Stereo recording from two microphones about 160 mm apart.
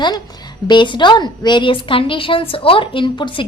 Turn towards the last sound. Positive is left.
turn(degrees=30)  # may be behind; listen again after turning